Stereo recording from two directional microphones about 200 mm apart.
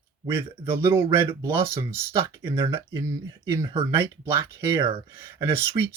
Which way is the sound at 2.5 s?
15° right (ahead or behind).